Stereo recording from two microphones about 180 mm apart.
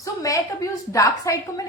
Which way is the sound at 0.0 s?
20° left (ahead or behind).